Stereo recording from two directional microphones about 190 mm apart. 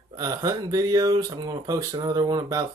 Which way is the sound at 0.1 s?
20° right (ahead or behind).